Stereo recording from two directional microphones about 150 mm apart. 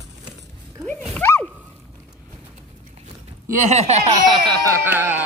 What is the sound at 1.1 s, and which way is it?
Dog, 10° left (ahead or behind).